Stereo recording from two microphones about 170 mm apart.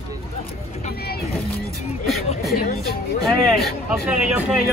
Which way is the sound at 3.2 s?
Centre (ahead or behind).